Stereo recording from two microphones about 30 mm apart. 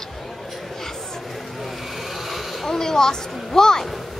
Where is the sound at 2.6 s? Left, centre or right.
Centre.